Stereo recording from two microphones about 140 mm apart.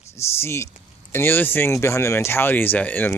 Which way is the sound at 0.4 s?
20° left (ahead or behind).